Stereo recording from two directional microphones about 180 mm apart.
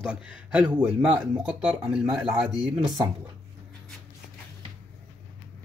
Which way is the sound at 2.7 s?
20° right (ahead or behind).